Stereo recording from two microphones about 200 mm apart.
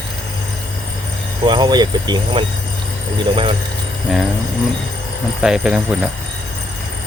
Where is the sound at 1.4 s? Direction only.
20° right (ahead or behind).